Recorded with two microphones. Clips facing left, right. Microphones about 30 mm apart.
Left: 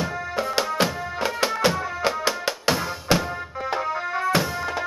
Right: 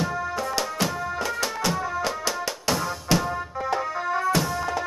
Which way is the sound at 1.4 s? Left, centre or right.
Left.